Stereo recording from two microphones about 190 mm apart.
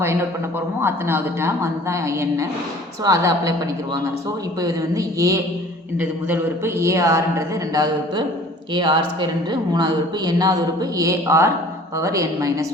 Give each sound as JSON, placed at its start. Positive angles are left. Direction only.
{"t": 0.8, "sound": "a man's voice", "side_deg": -10}
{"t": 4.6, "sound": "a man's voice", "side_deg": -15}